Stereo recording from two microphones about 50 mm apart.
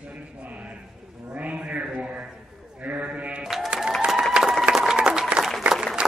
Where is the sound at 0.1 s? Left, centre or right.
Right.